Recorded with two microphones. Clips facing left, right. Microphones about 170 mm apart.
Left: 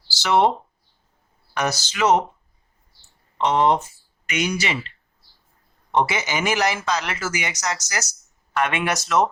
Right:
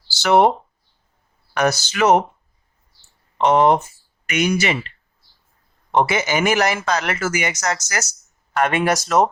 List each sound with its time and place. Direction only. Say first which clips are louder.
0.2 s speech: right 4 dB; 55° right (ahead or behind)
1.5 s speech: right 5 dB; 55° right (ahead or behind)
3.3 s speech: right 4 dB; 55° right (ahead or behind)
5.9 s speech: right 3 dB; 55° right (ahead or behind)
8.5 s speech: right 4 dB; 40° right (ahead or behind)